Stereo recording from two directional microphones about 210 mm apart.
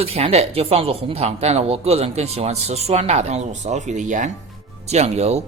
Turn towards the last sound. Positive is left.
turn(degrees=-30)  # may be behind; listen again after turning